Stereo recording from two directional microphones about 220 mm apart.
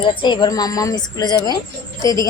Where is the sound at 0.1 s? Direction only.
20° left (ahead or behind).